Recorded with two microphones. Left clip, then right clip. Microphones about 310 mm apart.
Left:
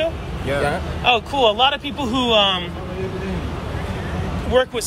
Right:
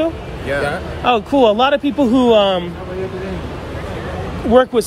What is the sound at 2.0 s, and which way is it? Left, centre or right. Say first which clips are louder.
Speech: right 8 dB; right.